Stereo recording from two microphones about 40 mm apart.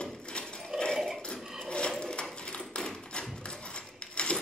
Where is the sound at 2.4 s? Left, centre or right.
Left.